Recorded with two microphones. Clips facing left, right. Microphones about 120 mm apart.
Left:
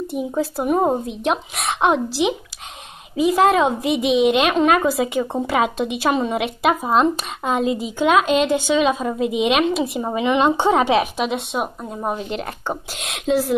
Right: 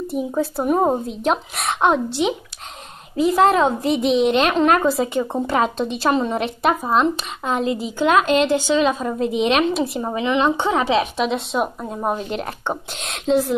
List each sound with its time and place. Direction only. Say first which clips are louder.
0.0 s a woman's voice: even; centre (ahead or behind)
10.2 s a woman's voice: left 2 dB; 15° left (ahead or behind)
11.1 s a woman's voice: right 2 dB; centre (ahead or behind)
12.3 s speech: right 1 dB; 35° right (ahead or behind)
12.6 s a woman's voice: right 1 dB; 10° left (ahead or behind)